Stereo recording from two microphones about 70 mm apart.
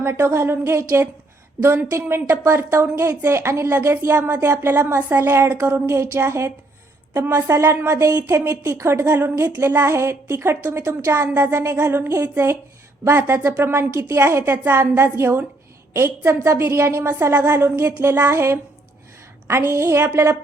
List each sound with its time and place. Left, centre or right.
0.0 s a woman's voice: right
6.0 s a woman's voice: right